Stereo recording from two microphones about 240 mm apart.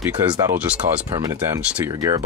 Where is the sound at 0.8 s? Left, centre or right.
Right.